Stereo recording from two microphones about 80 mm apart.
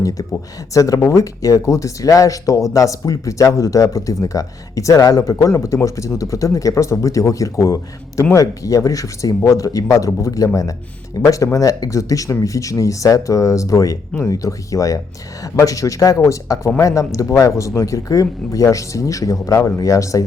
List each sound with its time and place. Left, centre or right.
0.0 s speech: left